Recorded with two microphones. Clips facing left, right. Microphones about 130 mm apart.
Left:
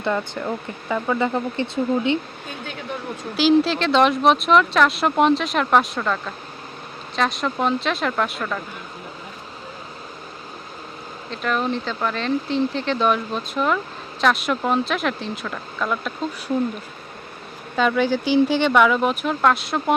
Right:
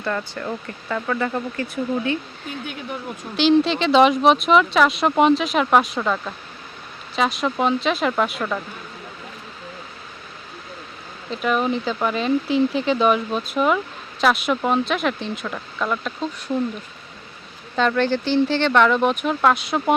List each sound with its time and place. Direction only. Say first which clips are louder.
0.0 s speech: left 2 dB; 15° left (ahead or behind)
3.3 s speech: even; 5° left (ahead or behind)
11.3 s speech: right 2 dB; 5° right (ahead or behind)
17.7 s speech: even; 5° left (ahead or behind)